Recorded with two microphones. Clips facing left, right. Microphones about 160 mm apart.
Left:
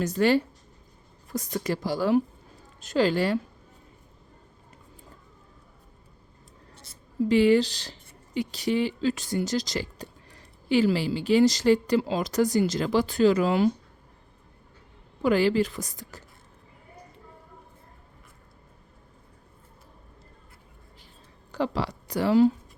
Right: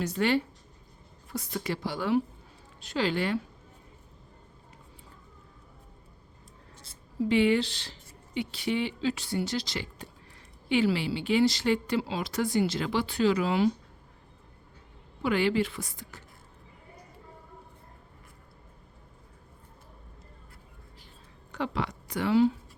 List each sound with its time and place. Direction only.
0.0 s speech: 40° left (ahead or behind)
7.3 s speech: 40° left (ahead or behind)
15.2 s speech: 40° left (ahead or behind)
21.5 s speech: 35° left (ahead or behind)